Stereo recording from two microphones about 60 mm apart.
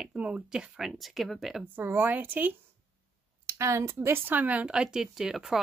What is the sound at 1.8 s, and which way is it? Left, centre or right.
Speech, right.